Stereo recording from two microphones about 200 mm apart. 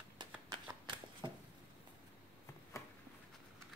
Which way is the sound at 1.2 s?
25° right (ahead or behind).